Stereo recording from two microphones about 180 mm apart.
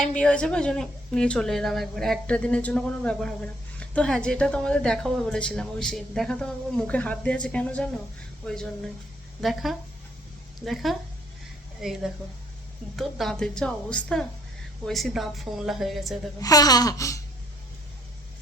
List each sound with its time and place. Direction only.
0.0 s speech: 5° left (ahead or behind)
16.4 s babbling: 20° left (ahead or behind)